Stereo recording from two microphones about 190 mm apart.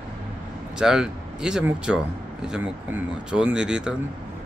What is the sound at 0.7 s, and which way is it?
Speech, 5° right (ahead or behind).